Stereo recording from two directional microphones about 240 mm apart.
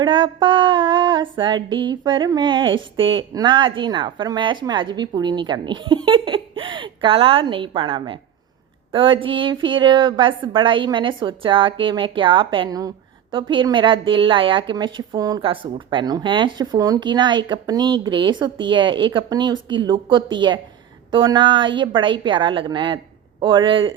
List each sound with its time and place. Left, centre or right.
0.0 s female singing: centre